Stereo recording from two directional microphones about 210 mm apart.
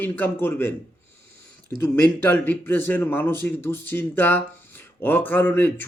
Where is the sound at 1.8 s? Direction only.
10° left (ahead or behind).